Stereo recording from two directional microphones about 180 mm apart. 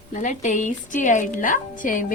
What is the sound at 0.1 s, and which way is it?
A woman's voice, 45° left (ahead or behind).